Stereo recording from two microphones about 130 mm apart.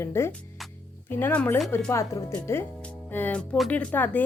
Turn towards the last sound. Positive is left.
turn(degrees=10)  # may be behind; listen again after turning